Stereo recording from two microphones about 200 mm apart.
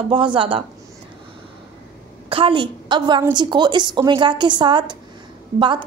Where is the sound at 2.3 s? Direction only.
25° right (ahead or behind).